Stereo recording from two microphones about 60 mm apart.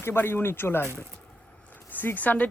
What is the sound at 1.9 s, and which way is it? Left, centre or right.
Speech, left.